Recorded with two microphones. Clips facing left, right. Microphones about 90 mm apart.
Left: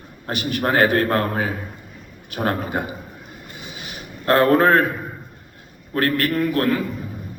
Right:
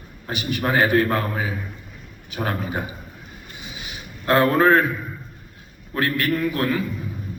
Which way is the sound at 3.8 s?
45° left (ahead or behind).